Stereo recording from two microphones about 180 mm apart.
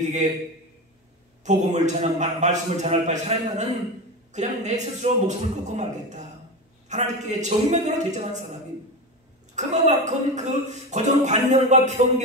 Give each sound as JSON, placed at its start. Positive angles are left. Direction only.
{"t": 1.4, "sound": "speech", "side_deg": -40}
{"t": 9.6, "sound": "speech", "side_deg": -40}